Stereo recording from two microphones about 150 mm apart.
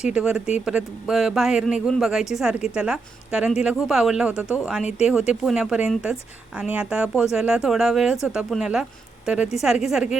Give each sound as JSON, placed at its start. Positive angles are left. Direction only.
{"t": 0.1, "sound": "speech", "side_deg": -5}